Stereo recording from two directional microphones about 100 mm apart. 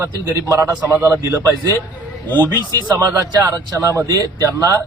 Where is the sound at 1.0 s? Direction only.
20° right (ahead or behind).